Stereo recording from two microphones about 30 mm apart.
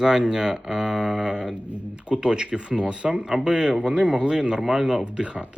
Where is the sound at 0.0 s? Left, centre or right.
Right.